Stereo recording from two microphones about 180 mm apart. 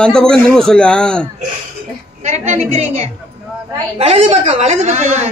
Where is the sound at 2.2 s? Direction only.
40° right (ahead or behind).